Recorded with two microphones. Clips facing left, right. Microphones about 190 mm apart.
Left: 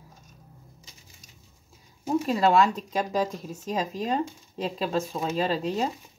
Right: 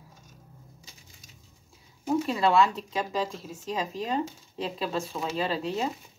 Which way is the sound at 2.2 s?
40° left (ahead or behind).